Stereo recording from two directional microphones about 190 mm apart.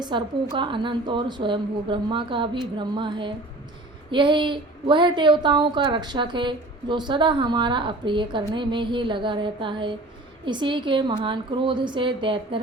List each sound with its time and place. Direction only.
0.0 s a woman's voice: 25° right (ahead or behind)